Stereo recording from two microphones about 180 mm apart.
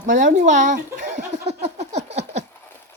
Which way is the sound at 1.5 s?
35° right (ahead or behind).